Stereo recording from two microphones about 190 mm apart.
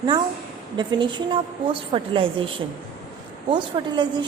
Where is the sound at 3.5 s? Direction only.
25° right (ahead or behind).